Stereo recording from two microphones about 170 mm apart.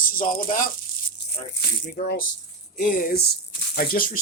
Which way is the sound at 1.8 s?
65° left (ahead or behind).